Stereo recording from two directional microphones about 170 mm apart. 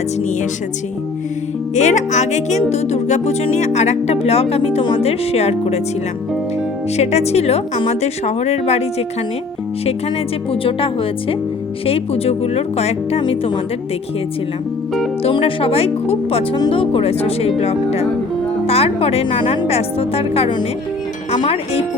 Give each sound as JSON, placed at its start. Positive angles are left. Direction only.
{"t": 1.7, "sound": "speech", "side_deg": 45}
{"t": 6.9, "sound": "speech", "side_deg": 40}
{"t": 10.5, "sound": "speech", "side_deg": 30}
{"t": 15.2, "sound": "speech", "side_deg": 30}